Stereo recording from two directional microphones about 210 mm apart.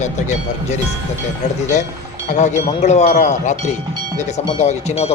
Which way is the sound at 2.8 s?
35° left (ahead or behind).